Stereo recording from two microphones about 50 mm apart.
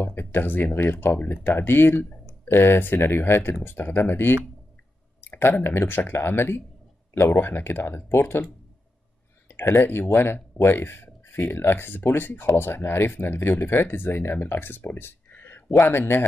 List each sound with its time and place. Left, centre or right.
0.0 s speech: left
9.5 s speech: left
15.0 s a sound: left
15.9 s speech: left